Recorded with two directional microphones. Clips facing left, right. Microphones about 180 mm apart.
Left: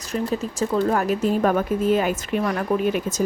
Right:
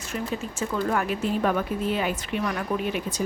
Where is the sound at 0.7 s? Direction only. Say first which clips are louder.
Left 5 dB; 40° left (ahead or behind).